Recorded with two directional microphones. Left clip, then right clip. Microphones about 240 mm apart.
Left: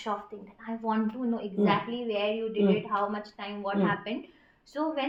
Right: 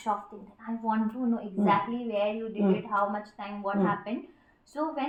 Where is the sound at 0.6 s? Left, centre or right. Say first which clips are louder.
Right 1 dB; left.